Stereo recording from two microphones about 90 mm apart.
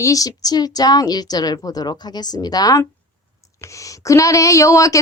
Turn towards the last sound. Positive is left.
turn(degrees=35)  # may be behind; listen again after turning